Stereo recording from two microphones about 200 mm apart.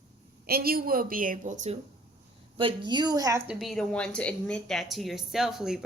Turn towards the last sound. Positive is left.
turn(degrees=0)  # may be behind; listen again after turning